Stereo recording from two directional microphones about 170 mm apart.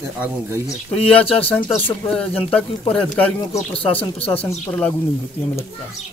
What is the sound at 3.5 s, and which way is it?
Speech, 35° left (ahead or behind).